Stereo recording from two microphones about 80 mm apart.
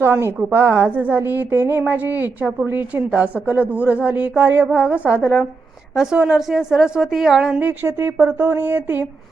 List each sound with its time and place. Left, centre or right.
0.0 s a woman's voice: right; by 7.6 s centre
7.6 s a woman's voice: right